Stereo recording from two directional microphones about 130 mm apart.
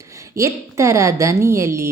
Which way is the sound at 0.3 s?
25° right (ahead or behind).